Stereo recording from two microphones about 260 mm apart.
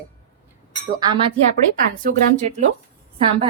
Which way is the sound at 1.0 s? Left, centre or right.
Centre.